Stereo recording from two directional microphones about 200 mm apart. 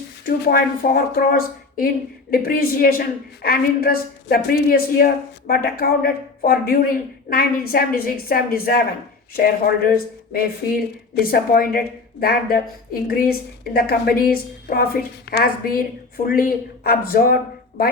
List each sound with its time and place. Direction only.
0.3 s a woman's voice: 45° left (ahead or behind)